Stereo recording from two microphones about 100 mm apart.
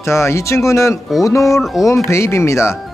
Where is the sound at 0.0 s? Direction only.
25° left (ahead or behind).